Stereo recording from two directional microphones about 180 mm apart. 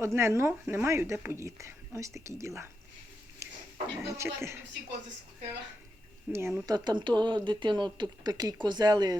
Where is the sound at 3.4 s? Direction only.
15° right (ahead or behind).